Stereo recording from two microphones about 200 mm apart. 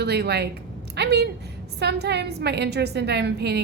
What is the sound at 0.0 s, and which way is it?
A woman's voice, 55° right (ahead or behind).